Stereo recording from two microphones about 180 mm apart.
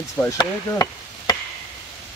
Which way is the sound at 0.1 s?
15° left (ahead or behind).